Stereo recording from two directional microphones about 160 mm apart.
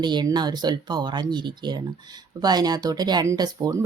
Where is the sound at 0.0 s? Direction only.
30° right (ahead or behind).